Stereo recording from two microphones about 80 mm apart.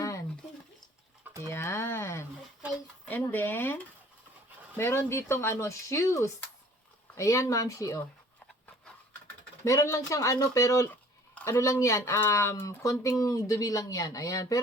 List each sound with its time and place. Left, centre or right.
0.0 s a sound: left
1.5 s speech: left
9.6 s speech: left